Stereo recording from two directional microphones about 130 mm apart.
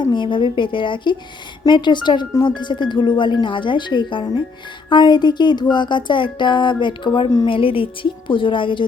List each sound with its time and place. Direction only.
0.0 s speech: 40° left (ahead or behind)